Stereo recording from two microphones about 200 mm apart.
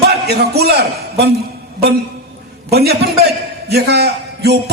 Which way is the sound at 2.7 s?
55° right (ahead or behind).